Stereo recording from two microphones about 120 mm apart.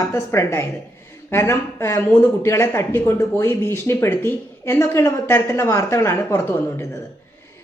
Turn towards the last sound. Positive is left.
turn(degrees=20)  # may be behind; listen again after turning